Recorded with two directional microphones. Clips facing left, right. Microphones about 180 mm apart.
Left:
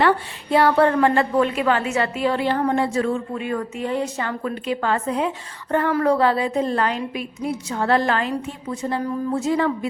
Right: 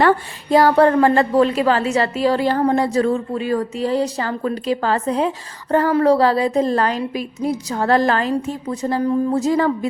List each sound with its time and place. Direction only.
0.0 s a woman's voice: 40° right (ahead or behind)